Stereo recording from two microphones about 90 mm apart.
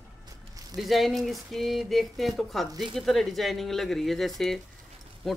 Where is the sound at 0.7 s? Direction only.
Centre (ahead or behind).